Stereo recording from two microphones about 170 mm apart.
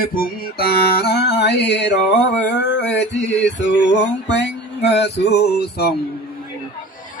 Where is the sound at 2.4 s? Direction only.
90° left.